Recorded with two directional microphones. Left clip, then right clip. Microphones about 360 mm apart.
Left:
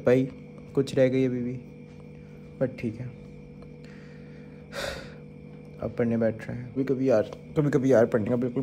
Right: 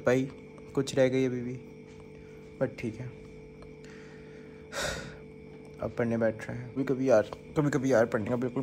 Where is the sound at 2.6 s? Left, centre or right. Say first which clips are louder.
Left 3 dB; centre.